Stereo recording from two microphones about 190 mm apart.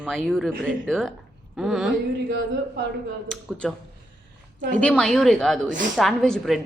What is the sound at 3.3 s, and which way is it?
Speech, centre (ahead or behind).